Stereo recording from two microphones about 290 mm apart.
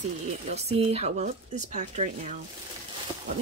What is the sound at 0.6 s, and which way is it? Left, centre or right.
Speech, right.